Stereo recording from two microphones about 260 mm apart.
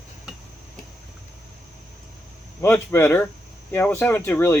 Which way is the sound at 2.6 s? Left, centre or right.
Centre.